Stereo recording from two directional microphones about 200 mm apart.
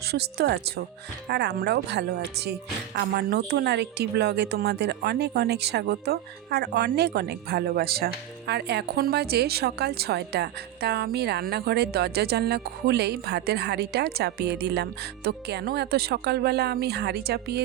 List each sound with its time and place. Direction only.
0.1 s a woman's voice: 55° right (ahead or behind)